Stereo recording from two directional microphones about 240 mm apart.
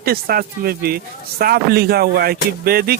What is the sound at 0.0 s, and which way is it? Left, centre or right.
Speech, right.